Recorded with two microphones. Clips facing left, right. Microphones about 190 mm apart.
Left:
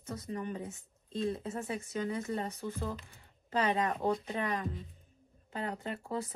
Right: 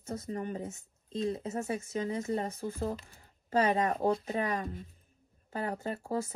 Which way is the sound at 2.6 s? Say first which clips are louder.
Right 3 dB; 40° right (ahead or behind).